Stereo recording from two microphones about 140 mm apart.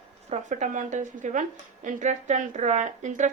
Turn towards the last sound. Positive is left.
turn(degrees=-65)  # may be behind; listen again after turning